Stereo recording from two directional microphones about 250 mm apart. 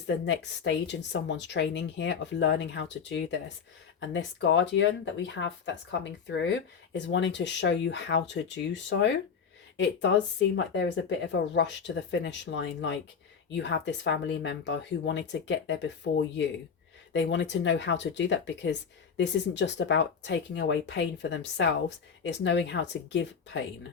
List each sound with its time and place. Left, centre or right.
0.1 s speech: left